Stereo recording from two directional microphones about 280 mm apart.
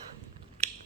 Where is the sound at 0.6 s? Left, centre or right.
Right.